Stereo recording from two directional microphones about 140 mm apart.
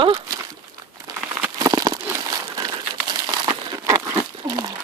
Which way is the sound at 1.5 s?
25° right (ahead or behind).